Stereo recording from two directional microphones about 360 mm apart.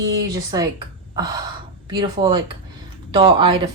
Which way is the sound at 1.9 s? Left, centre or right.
Centre.